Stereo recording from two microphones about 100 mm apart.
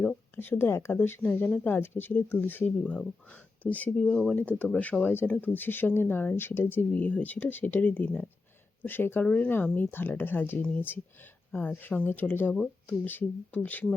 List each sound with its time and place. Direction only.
0.3 s speech: 20° left (ahead or behind)
4.0 s speech: 5° left (ahead or behind)